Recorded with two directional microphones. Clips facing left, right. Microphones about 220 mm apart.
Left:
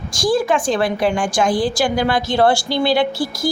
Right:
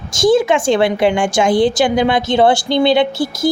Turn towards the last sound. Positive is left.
turn(degrees=-25)  # may be behind; listen again after turning